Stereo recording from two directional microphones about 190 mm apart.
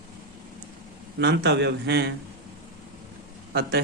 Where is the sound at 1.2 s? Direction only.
65° right (ahead or behind).